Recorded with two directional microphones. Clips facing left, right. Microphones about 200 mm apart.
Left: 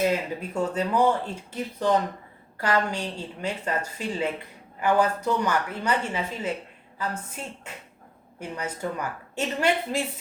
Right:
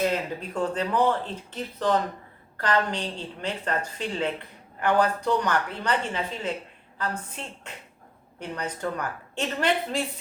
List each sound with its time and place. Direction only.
0.1 s speech: 10° left (ahead or behind)
8.4 s speech: 10° left (ahead or behind)